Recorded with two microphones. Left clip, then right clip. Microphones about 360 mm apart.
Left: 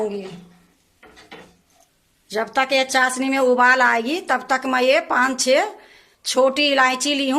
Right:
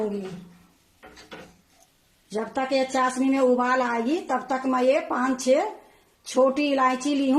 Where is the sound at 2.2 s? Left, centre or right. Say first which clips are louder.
Left 7 dB; left.